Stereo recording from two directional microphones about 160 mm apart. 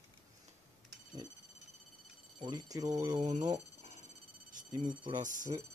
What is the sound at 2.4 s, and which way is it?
Speech, 25° right (ahead or behind).